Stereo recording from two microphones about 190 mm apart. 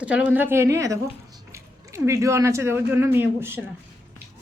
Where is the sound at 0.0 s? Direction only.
5° right (ahead or behind).